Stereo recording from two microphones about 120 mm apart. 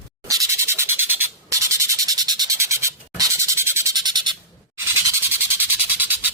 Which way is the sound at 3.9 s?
35° right (ahead or behind).